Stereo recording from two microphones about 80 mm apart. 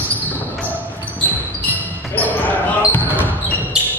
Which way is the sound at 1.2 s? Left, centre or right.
Left.